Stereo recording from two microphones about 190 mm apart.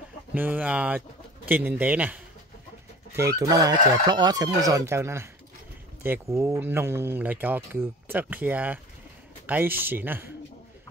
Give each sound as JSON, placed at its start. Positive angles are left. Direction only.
{"t": 0.3, "sound": "speech", "side_deg": -10}